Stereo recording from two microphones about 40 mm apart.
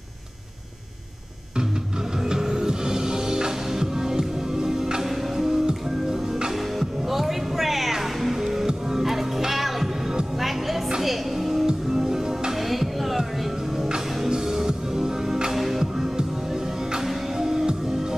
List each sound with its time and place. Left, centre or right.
2.2 s music: centre
6.8 s music: centre
11.0 s music: centre
11.6 s music: centre
12.5 s music: centre
15.5 s music: centre